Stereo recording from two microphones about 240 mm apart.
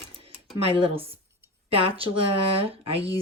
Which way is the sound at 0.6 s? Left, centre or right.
Right.